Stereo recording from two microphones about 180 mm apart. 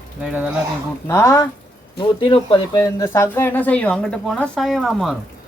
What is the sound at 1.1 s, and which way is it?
Speech, 15° left (ahead or behind).